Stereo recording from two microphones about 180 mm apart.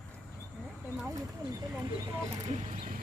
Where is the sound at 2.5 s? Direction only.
40° right (ahead or behind).